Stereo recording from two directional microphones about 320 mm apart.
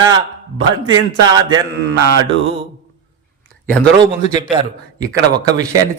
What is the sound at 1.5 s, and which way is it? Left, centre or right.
Speech, right.